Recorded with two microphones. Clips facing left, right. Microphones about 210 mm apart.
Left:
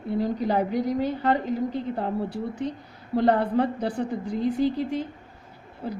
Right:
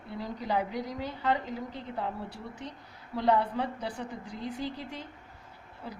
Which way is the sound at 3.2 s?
55° left (ahead or behind).